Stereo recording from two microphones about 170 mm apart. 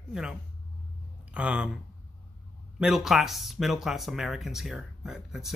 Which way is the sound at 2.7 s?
5° right (ahead or behind).